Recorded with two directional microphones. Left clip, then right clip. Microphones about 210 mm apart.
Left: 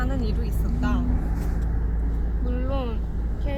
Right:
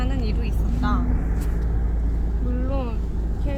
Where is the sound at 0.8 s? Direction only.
30° left (ahead or behind).